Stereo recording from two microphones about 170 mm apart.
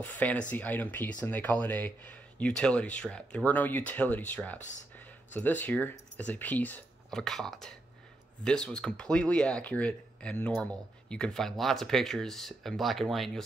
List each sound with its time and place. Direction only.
0.0 s speech: 10° left (ahead or behind)